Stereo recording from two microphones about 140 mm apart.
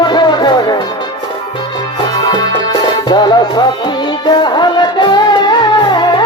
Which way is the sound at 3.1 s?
30° left (ahead or behind).